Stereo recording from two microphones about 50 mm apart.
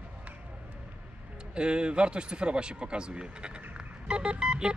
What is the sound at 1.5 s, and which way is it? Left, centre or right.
Speech, centre.